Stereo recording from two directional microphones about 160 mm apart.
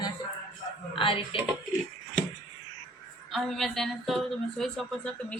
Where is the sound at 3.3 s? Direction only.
Centre (ahead or behind).